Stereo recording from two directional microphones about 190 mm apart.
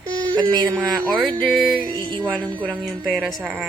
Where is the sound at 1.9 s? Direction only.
20° right (ahead or behind).